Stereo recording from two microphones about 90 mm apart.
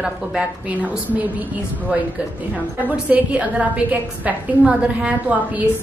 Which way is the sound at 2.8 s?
15° right (ahead or behind).